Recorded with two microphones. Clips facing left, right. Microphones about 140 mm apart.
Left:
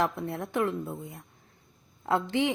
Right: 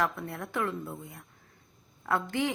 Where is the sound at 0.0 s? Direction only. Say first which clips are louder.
Left 3 dB; 25° left (ahead or behind).